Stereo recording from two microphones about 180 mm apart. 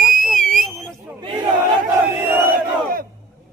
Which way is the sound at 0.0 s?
50° right (ahead or behind).